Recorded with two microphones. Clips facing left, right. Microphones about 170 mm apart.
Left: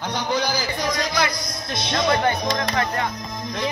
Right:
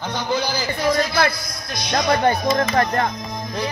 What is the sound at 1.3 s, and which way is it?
Speech, 20° left (ahead or behind).